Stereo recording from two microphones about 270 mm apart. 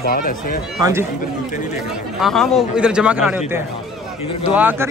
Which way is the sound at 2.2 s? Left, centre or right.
Centre.